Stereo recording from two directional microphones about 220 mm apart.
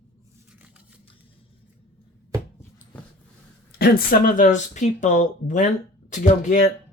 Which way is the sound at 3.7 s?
45° left (ahead or behind).